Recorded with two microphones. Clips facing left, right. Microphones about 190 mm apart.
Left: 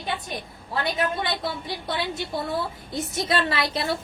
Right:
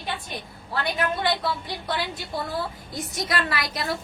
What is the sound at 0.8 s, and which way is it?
A woman's voice, 25° left (ahead or behind).